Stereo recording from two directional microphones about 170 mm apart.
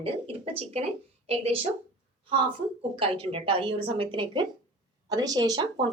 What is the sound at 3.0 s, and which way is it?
A woman's voice, 35° right (ahead or behind).